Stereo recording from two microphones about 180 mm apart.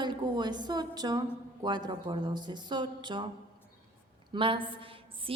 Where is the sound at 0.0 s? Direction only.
25° right (ahead or behind).